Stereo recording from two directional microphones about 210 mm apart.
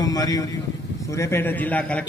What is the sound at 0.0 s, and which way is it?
A man's voice, 15° left (ahead or behind).